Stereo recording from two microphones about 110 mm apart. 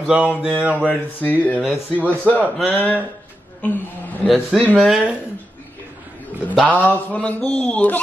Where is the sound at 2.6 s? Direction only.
15° left (ahead or behind).